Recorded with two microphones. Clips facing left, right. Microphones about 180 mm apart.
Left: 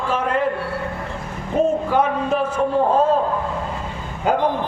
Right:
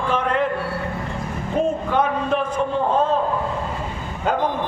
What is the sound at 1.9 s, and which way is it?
A man's voice, 10° left (ahead or behind).